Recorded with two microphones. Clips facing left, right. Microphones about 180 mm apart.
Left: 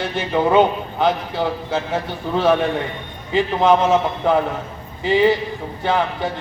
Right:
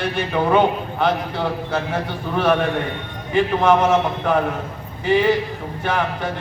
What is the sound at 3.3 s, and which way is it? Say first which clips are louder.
Speech: even; 20° left (ahead or behind).